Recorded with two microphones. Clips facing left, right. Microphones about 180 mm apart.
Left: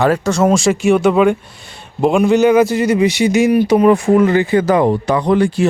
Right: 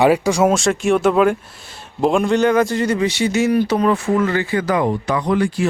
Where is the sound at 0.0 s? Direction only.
10° right (ahead or behind).